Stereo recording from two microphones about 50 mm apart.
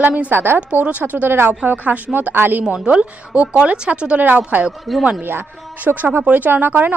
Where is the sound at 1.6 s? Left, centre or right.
Right.